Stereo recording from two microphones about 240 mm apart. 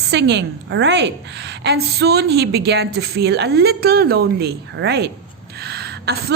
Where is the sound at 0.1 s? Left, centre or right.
Right.